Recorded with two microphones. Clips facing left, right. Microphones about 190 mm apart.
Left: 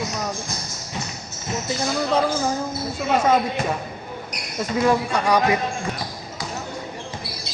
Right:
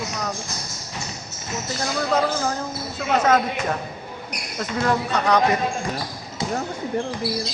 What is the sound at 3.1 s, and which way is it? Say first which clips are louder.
Speech: even; 10° left (ahead or behind).